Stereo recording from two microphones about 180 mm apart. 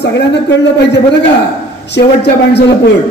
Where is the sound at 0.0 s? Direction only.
75° left (ahead or behind).